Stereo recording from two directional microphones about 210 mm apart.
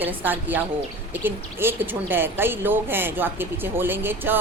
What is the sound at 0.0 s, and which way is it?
A woman's voice, 10° right (ahead or behind).